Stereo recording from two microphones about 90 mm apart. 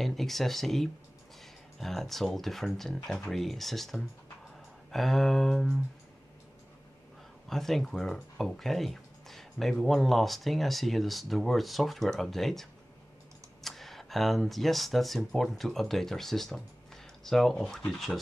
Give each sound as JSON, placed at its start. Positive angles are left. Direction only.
{"t": 0.0, "sound": "speech", "side_deg": 0}
{"t": 7.4, "sound": "speech", "side_deg": 5}